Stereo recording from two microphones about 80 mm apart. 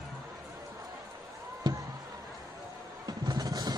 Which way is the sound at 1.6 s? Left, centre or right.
Right.